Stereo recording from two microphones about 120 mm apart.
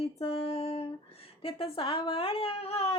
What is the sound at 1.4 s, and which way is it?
A woman's voice, 50° left (ahead or behind).